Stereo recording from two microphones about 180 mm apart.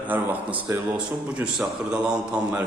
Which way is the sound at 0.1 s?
10° right (ahead or behind).